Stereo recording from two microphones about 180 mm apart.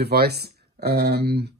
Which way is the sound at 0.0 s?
60° right (ahead or behind).